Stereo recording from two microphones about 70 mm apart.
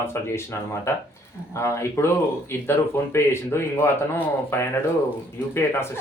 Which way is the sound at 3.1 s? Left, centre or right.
Left.